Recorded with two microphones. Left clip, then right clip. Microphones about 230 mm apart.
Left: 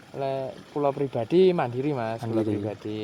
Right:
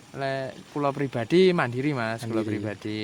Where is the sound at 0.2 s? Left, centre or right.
Right.